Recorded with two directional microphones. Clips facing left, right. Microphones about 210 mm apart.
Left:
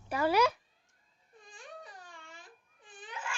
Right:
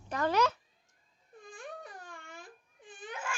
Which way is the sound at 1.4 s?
50° right (ahead or behind).